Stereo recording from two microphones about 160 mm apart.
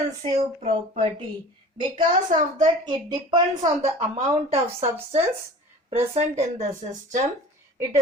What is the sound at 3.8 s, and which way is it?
Speech, 45° right (ahead or behind).